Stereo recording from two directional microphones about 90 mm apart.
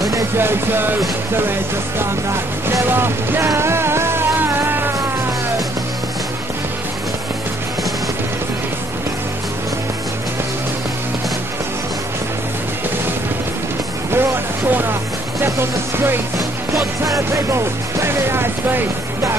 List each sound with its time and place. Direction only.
0.4 s music: 25° right (ahead or behind)
2.0 s music: 30° right (ahead or behind)
14.1 s music: 25° right (ahead or behind)
17.0 s music: 35° right (ahead or behind)